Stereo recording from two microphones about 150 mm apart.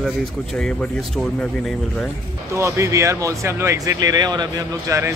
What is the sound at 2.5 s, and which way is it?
Speech, 20° right (ahead or behind).